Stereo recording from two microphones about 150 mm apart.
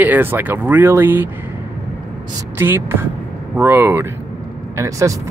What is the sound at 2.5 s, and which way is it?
Speech, 15° right (ahead or behind).